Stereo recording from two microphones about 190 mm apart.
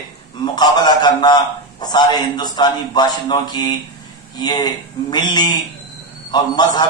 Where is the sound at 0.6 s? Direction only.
20° left (ahead or behind).